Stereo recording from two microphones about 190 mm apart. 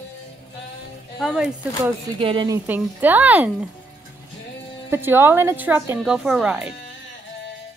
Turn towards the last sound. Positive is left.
turn(degrees=-5)  # may be behind; listen again after turning